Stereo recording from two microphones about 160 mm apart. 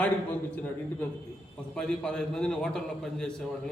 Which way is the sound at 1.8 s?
5° left (ahead or behind).